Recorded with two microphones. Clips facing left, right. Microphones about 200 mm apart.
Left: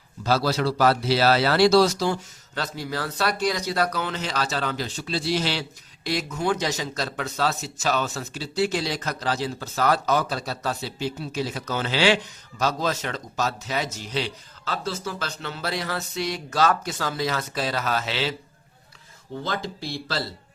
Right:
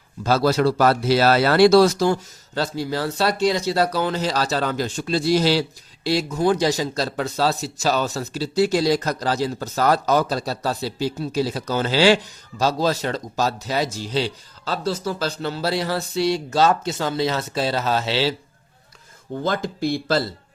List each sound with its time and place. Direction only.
0.3 s speech: 50° right (ahead or behind)
2.6 s speech: 30° right (ahead or behind)
19.4 s speech: 50° right (ahead or behind)